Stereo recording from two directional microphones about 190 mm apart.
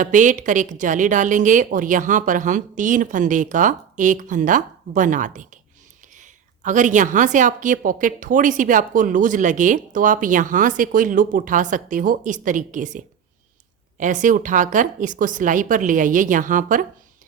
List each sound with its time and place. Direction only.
0.0 s a woman's voice: 40° right (ahead or behind)
14.0 s a woman's voice: 40° right (ahead or behind)